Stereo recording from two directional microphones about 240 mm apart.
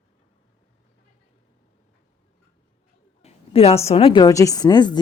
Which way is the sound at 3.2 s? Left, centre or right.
Left.